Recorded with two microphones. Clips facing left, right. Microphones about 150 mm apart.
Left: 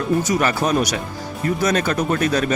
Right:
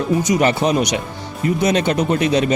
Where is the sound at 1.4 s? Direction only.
45° left (ahead or behind).